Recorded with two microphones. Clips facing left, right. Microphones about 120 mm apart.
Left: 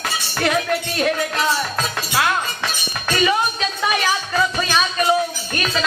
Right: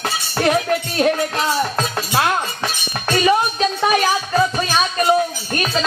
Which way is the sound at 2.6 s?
35° right (ahead or behind).